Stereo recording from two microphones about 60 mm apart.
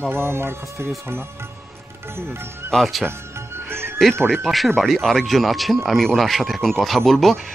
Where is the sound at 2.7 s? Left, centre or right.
Centre.